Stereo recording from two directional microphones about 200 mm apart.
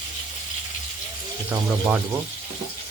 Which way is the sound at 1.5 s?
5° right (ahead or behind).